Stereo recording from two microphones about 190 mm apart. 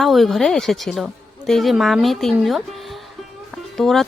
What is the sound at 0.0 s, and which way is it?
Speech, centre (ahead or behind).